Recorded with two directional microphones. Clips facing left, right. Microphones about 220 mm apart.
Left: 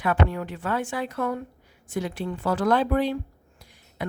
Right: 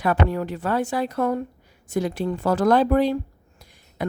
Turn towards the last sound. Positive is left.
turn(degrees=-40)  # may be behind; listen again after turning